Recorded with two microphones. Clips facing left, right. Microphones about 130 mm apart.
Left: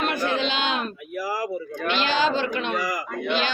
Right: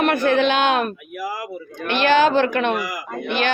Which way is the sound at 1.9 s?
55° right (ahead or behind).